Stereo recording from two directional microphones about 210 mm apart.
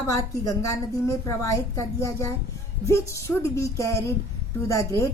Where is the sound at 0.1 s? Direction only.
15° left (ahead or behind).